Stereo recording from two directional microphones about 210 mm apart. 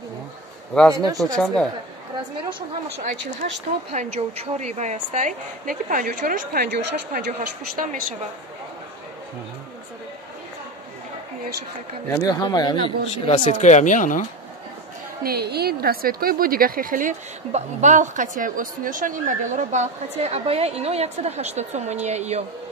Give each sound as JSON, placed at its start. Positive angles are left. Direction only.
{"t": 0.9, "sound": "speech", "side_deg": -15}
{"t": 1.3, "sound": "a woman's voice", "side_deg": 0}
{"t": 3.9, "sound": "a woman's voice", "side_deg": -30}
{"t": 12.1, "sound": "speech", "side_deg": 15}
{"t": 15.2, "sound": "a woman's voice", "side_deg": -50}